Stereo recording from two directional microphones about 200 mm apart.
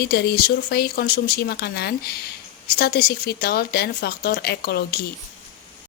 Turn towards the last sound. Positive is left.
turn(degrees=50)  # may be behind; listen again after turning